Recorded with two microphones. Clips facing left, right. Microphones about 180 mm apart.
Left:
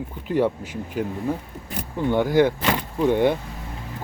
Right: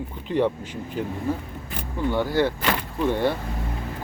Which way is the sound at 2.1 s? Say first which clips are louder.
Left 4 dB; 15° left (ahead or behind).